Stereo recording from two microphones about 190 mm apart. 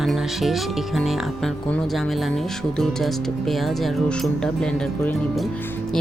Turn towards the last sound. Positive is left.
turn(degrees=5)  # may be behind; listen again after turning